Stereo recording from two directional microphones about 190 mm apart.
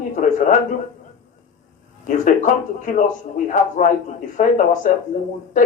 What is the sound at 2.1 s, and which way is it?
Speech, 40° left (ahead or behind).